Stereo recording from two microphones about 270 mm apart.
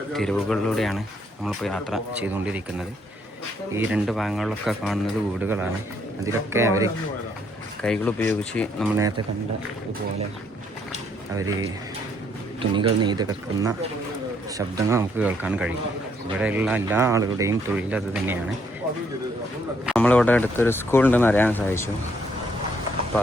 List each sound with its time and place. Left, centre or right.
0.1 s speech: centre
7.8 s speech: centre
9.0 s speech: centre
11.3 s speech: centre
12.7 s speech: centre
14.8 s speech: centre
19.8 s speech: centre